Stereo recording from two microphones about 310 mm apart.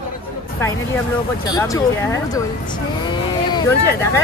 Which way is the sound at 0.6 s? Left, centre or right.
Centre.